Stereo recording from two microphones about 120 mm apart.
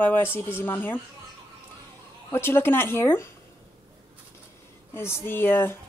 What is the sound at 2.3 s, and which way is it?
Speech, 20° left (ahead or behind).